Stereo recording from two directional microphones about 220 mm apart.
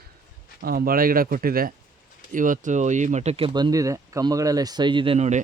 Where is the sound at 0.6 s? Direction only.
40° right (ahead or behind).